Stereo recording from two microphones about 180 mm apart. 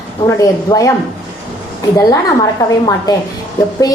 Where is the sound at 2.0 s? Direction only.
20° left (ahead or behind).